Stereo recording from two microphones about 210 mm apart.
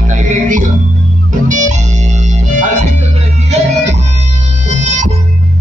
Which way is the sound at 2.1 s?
35° right (ahead or behind).